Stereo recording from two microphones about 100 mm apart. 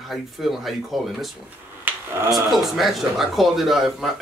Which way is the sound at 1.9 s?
15° right (ahead or behind).